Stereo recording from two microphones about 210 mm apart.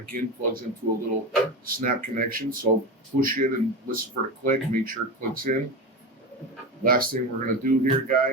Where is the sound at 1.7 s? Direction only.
40° right (ahead or behind).